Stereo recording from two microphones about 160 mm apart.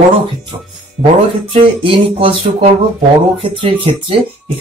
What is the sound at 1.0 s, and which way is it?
Speech, 35° right (ahead or behind).